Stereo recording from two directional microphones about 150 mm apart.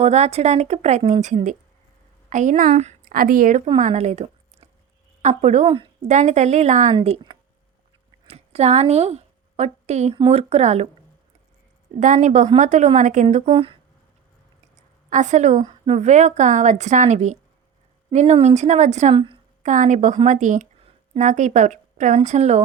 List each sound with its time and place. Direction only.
0.0 s a woman's voice: 45° right (ahead or behind)
2.6 s a woman's voice: 45° right (ahead or behind)
3.0 s a woman's voice: 70° right (ahead or behind)
3.8 s a woman's voice: 50° right (ahead or behind)
5.6 s a woman's voice: 35° right (ahead or behind)
6.0 s a woman's voice: 50° right (ahead or behind)
6.9 s a woman's voice: 35° right (ahead or behind)
11.9 s a woman's voice: 55° right (ahead or behind)
13.5 s speech: 35° right (ahead or behind)
15.1 s a woman's voice: 55° right (ahead or behind)
19.1 s a woman's voice: 35° right (ahead or behind)
19.6 s a woman's voice: 55° right (ahead or behind)